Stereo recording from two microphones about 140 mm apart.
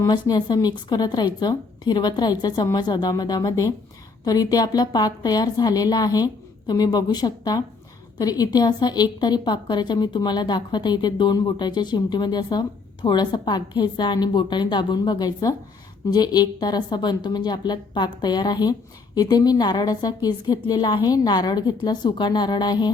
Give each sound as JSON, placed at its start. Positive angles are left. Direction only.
{"t": 0.0, "sound": "a woman's voice", "side_deg": 30}